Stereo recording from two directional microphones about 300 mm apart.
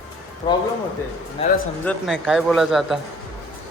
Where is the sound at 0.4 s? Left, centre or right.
Centre.